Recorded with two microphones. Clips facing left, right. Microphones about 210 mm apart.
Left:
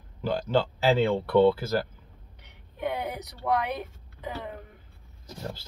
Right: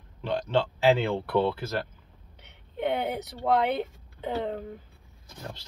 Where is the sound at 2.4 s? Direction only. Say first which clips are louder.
Right 3 dB; 25° right (ahead or behind).